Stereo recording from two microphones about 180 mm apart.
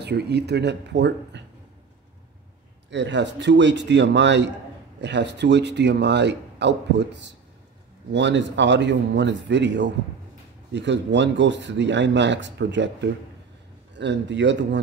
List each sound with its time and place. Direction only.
0.0 s speech: 65° right (ahead or behind)
2.9 s speech: 75° right (ahead or behind)